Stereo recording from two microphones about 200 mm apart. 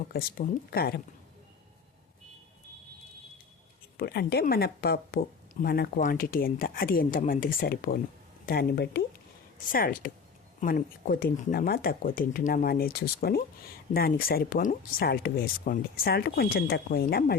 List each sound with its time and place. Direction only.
0.1 s speech: 50° left (ahead or behind)
3.9 s speech: 50° left (ahead or behind)